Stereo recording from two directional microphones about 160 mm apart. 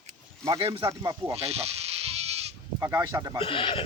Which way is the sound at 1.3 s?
40° right (ahead or behind).